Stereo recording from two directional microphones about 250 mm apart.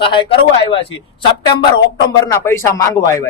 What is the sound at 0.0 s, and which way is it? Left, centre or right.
Speech, centre.